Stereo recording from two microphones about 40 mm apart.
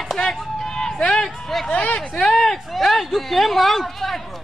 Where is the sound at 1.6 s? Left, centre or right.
Left.